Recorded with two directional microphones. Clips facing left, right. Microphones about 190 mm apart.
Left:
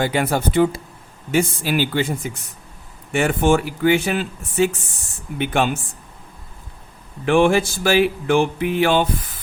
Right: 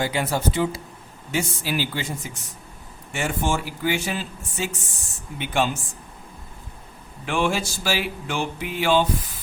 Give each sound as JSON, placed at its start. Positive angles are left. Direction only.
{"t": 0.0, "sound": "speech", "side_deg": 55}
{"t": 7.3, "sound": "speech", "side_deg": 55}